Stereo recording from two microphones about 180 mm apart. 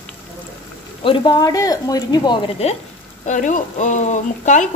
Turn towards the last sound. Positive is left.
turn(degrees=40)  # may be behind; listen again after turning